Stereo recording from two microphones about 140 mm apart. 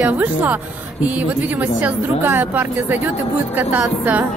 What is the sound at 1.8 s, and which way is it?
A woman's voice, 15° right (ahead or behind).